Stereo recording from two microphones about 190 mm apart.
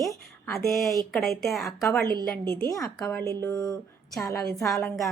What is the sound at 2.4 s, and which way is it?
Speech, 20° right (ahead or behind).